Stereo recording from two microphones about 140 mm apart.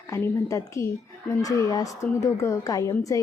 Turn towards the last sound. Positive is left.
turn(degrees=25)  # may be behind; listen again after turning